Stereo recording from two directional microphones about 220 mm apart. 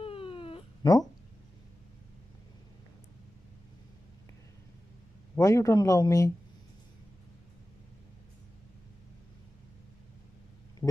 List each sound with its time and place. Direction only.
0.0 s cat: 25° left (ahead or behind)
5.3 s a man's voice: 15° left (ahead or behind)
10.8 s a sound: 5° left (ahead or behind)